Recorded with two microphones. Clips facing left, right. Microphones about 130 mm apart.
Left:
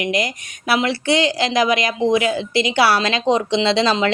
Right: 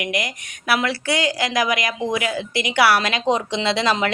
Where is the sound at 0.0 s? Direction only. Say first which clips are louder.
Left 4 dB; 30° left (ahead or behind).